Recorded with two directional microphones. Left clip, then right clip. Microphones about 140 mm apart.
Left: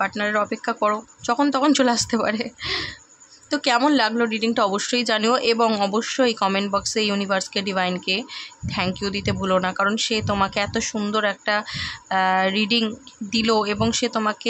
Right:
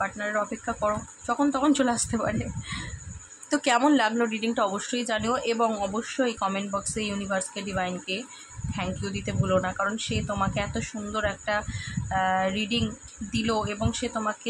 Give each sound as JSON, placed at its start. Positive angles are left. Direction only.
{"t": 0.0, "sound": "a woman's voice", "side_deg": 35}
{"t": 3.4, "sound": "a woman's voice", "side_deg": 20}